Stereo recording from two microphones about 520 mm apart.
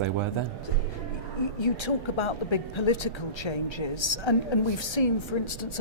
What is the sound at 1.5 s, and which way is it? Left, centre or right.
A woman's voice, left.